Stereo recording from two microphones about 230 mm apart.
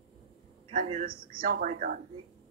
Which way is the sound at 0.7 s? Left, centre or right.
Right.